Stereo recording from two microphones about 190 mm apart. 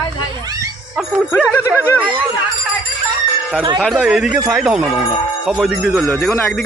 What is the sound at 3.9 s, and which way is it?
Speech, 5° right (ahead or behind).